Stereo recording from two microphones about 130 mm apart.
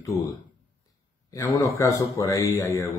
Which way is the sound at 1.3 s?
25° left (ahead or behind).